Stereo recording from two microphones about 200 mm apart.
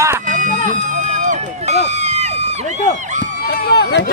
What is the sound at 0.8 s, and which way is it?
Speech, 40° right (ahead or behind).